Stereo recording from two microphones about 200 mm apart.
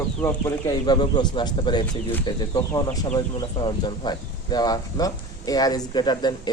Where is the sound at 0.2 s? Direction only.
15° left (ahead or behind).